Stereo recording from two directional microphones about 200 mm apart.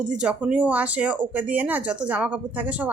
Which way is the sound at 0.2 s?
5° right (ahead or behind).